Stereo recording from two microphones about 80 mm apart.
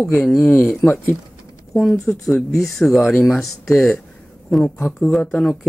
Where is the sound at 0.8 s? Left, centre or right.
Left.